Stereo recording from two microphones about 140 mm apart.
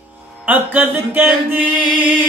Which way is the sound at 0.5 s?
15° right (ahead or behind).